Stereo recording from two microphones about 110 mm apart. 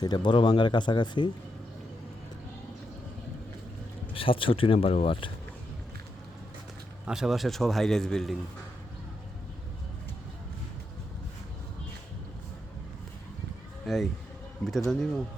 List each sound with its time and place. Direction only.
0.0 s speech: 40° left (ahead or behind)
4.1 s speech: 55° left (ahead or behind)
7.1 s a man's voice: 5° right (ahead or behind)
13.8 s a man's voice: centre (ahead or behind)